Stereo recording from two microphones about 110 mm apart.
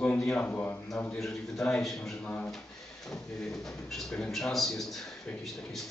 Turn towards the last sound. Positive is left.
turn(degrees=0)  # may be behind; listen again after turning